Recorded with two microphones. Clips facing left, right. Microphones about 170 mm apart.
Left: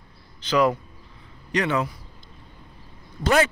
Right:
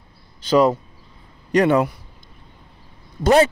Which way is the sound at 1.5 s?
50° right (ahead or behind).